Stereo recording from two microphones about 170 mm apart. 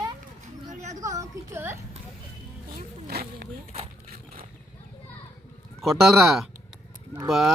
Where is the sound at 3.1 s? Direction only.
65° right (ahead or behind).